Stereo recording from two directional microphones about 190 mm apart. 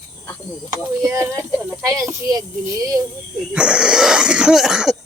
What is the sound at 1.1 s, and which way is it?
Speech, 15° right (ahead or behind).